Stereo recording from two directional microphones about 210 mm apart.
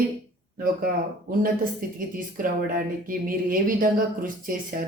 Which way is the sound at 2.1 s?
40° right (ahead or behind).